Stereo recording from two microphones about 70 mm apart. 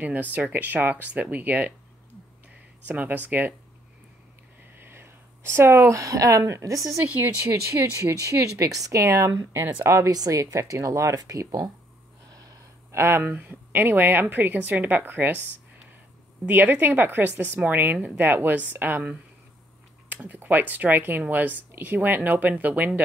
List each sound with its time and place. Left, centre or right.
0.0 s speech: right
2.9 s speech: right
4.7 s speech: right
7.1 s speech: right
7.4 s speech: right
9.0 s speech: right
10.1 s speech: right
12.3 s a sound: right
12.9 s speech: right
16.4 s speech: right